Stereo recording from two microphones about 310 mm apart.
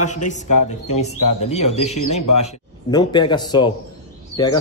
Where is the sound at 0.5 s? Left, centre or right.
Left.